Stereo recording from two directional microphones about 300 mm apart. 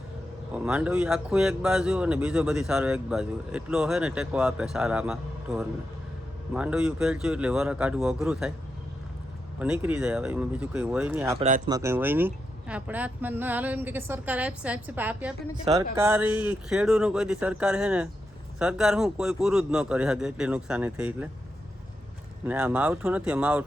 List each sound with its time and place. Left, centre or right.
0.5 s speech: centre
9.6 s speech: centre
11.3 s speech: right
11.7 s speech: centre
22.4 s speech: centre